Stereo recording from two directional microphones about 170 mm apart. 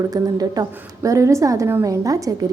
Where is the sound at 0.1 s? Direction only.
20° right (ahead or behind).